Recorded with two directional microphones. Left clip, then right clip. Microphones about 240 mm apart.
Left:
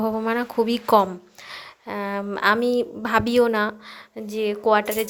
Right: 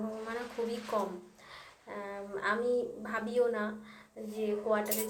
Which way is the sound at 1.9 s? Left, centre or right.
Left.